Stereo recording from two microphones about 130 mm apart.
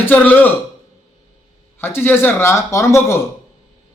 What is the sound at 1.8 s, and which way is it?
A man's voice, 15° left (ahead or behind).